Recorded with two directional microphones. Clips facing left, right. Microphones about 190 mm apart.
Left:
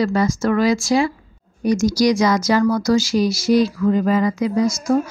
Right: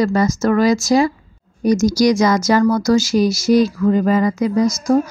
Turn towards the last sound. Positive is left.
turn(degrees=-40)  # may be behind; listen again after turning